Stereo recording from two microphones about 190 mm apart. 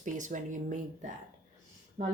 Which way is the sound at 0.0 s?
40° right (ahead or behind).